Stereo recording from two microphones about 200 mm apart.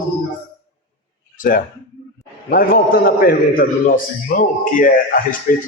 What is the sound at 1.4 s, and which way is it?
A man's voice, 45° left (ahead or behind).